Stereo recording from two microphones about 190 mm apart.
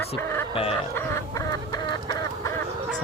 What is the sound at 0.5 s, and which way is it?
Chicken, 30° left (ahead or behind).